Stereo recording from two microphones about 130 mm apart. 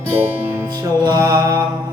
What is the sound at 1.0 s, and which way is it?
Music, 30° right (ahead or behind).